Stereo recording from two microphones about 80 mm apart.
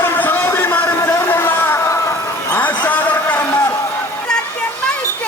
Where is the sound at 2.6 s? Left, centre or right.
Centre.